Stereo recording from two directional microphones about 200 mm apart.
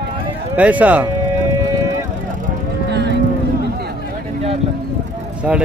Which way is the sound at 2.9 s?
60° right (ahead or behind).